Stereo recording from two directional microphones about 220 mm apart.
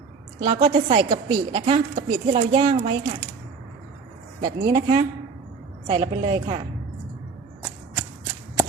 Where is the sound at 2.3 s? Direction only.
25° right (ahead or behind).